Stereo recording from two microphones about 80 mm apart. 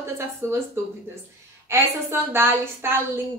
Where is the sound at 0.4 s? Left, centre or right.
Right.